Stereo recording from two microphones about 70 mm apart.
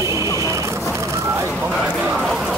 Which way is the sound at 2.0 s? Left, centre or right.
Centre.